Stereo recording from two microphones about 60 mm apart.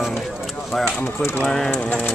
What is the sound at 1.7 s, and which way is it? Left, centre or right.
Speech, left.